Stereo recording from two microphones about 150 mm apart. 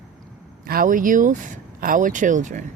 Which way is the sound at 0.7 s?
65° right (ahead or behind).